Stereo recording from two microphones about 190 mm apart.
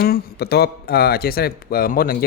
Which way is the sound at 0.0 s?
55° left (ahead or behind).